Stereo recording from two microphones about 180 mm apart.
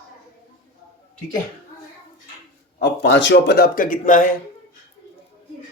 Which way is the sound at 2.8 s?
85° left.